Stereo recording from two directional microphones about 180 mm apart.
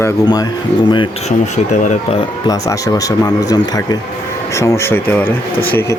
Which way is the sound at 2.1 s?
20° left (ahead or behind).